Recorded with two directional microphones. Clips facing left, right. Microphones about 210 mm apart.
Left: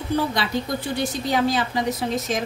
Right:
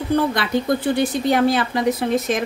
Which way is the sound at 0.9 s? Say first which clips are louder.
Right 5 dB; 55° right (ahead or behind).